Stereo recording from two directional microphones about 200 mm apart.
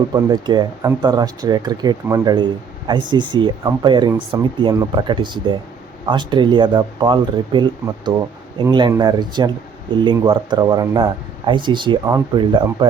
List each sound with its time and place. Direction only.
0.1 s speech: 20° right (ahead or behind)